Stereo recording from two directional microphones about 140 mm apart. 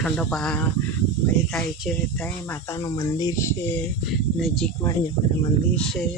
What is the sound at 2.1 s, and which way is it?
Speech, 15° left (ahead or behind).